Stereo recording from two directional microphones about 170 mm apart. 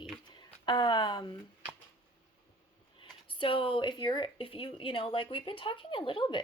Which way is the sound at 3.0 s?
30° left (ahead or behind).